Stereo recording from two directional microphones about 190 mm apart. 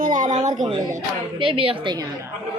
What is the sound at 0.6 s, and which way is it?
A woman's voice, 20° right (ahead or behind).